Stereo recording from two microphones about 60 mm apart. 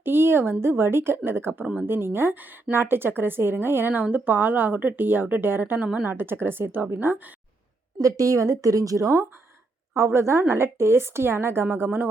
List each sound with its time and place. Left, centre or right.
0.0 s a sound: right
0.6 s a woman's voice: right
5.8 s a woman's voice: right
6.1 s a woman's voice: right
8.0 s a woman's voice: right
9.9 s a woman's voice: right